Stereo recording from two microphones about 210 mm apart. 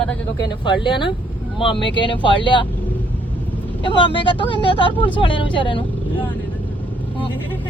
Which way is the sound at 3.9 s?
25° left (ahead or behind).